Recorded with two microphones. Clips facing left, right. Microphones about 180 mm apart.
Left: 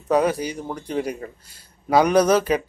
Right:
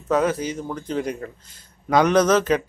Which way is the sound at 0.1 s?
15° left (ahead or behind).